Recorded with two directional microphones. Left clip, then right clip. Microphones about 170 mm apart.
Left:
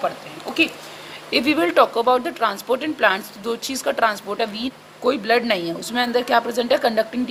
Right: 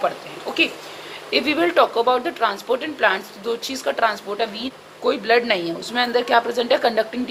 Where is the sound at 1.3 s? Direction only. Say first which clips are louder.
Even; 45° left (ahead or behind).